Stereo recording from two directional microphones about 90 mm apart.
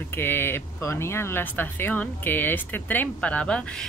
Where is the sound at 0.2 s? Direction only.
25° left (ahead or behind).